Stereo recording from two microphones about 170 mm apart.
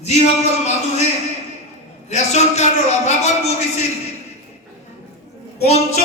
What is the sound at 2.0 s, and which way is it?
A man's voice, 40° left (ahead or behind).